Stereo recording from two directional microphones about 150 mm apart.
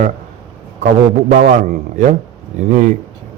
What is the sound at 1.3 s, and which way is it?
Speech, 55° right (ahead or behind).